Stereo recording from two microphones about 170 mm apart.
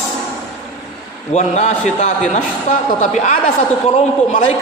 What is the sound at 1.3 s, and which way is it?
A woman's voice, 40° left (ahead or behind).